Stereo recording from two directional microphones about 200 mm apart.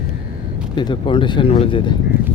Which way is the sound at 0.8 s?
25° left (ahead or behind).